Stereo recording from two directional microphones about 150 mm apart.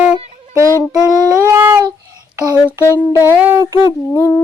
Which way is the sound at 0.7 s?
15° left (ahead or behind).